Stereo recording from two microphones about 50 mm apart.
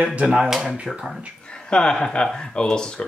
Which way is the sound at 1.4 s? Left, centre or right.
Centre.